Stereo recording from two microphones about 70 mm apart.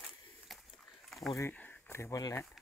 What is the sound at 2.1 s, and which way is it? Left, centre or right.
Speech, left.